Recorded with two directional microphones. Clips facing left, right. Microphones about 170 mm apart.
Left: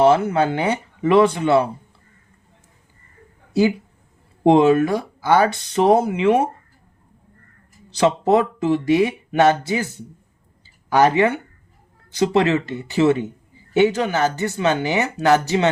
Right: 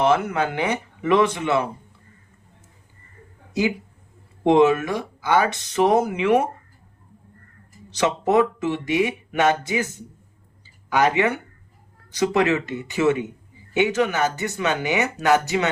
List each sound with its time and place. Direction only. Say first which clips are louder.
0.0 s speech: left 5 dB; 30° left (ahead or behind)
4.4 s speech: left 3 dB; 30° left (ahead or behind)
7.9 s speech: left 4 dB; 30° left (ahead or behind)
12.1 s speech: left 2 dB; 30° left (ahead or behind)